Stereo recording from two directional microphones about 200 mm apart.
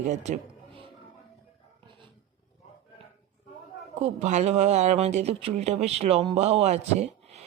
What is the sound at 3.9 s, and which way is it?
Speech, 35° right (ahead or behind).